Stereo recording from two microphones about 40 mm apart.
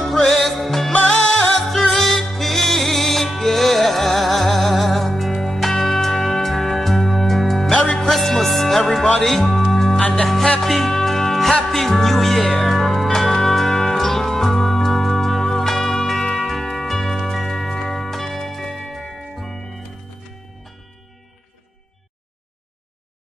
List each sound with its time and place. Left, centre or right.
0.0 s music: centre
2.0 s music: centre
7.7 s music: left
8.1 s music: centre